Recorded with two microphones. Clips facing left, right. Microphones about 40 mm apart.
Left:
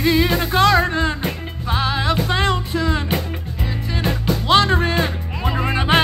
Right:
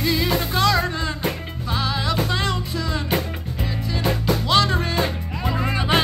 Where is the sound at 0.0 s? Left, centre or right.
Left.